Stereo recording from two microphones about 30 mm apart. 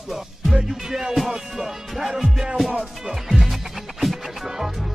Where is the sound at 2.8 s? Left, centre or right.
Centre.